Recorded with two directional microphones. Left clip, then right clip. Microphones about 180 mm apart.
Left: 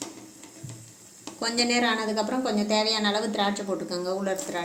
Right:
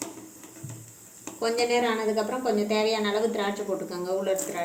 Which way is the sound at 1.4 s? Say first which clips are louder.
Even; 60° left (ahead or behind).